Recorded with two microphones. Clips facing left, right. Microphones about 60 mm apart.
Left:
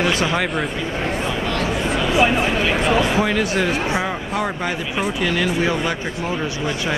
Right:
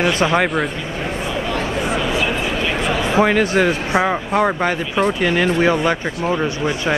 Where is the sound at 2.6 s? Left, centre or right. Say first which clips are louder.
Left 2 dB; centre.